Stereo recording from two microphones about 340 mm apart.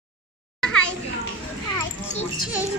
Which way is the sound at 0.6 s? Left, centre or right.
Centre.